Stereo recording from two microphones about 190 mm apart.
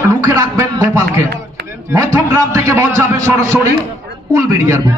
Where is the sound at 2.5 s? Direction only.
15° right (ahead or behind).